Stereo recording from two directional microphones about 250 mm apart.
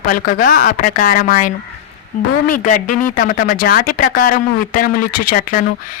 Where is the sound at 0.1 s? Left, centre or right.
Left.